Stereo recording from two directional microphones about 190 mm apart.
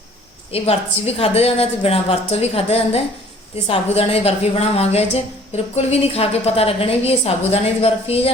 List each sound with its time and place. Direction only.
0.5 s a woman's voice: 30° left (ahead or behind)